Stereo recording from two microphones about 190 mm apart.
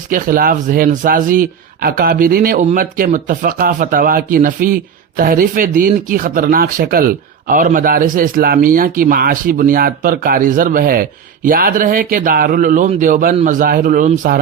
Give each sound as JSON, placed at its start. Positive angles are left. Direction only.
{"t": 0.1, "sound": "speech", "side_deg": -45}